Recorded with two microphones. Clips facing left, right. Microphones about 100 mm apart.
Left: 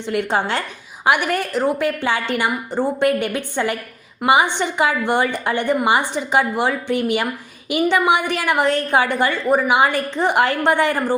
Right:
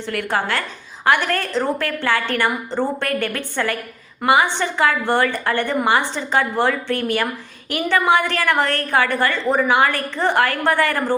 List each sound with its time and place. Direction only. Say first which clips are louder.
0.0 s a woman's voice: left 2 dB; 20° left (ahead or behind)